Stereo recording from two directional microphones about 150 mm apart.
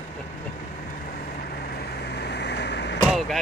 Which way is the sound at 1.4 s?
90° left.